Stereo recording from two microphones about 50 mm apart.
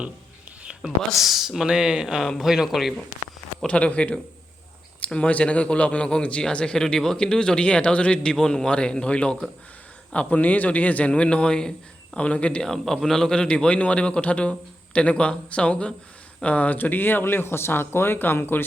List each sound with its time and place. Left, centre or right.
0.8 s speech: centre
1.5 s speech: centre
3.7 s a man's voice: left
12.6 s a man's voice: centre; by 18.6 s left